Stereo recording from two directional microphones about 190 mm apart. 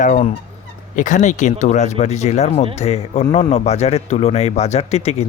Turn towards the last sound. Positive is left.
turn(degrees=35)  # may be behind; listen again after turning